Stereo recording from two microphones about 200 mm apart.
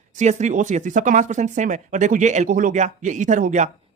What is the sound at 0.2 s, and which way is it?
Speech, 35° right (ahead or behind).